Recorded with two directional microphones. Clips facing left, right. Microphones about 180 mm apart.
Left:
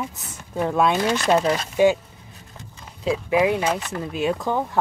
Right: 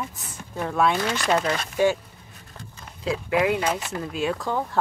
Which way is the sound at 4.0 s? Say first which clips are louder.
Left 3 dB; 20° left (ahead or behind).